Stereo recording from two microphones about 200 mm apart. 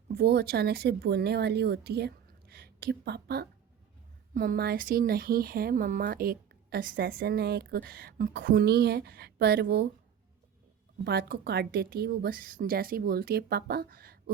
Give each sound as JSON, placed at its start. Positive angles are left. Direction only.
{"t": 0.1, "sound": "speech", "side_deg": -55}
{"t": 11.0, "sound": "speech", "side_deg": -55}